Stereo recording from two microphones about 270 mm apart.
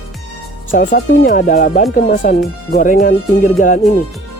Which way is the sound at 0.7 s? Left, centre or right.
Left.